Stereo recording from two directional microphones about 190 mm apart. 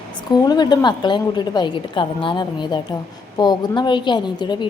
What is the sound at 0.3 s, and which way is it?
A woman's voice, 20° left (ahead or behind).